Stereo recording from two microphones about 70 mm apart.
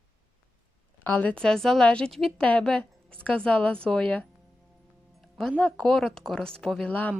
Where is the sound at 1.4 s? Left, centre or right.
Centre.